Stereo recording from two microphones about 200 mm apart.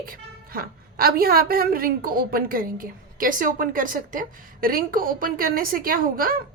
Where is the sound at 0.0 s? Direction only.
45° right (ahead or behind).